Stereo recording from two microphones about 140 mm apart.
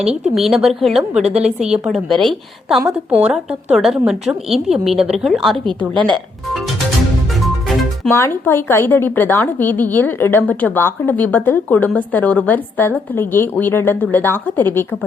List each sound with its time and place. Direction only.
0.0 s a woman's voice: 5° right (ahead or behind)
5.9 s speech: 35° right (ahead or behind)
8.1 s speech: 15° left (ahead or behind)